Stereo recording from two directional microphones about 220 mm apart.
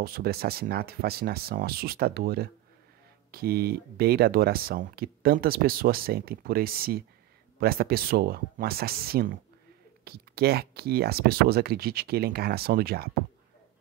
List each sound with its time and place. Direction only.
0.0 s speech: 45° right (ahead or behind)